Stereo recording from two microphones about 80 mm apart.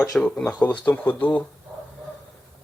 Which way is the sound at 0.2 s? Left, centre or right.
Centre.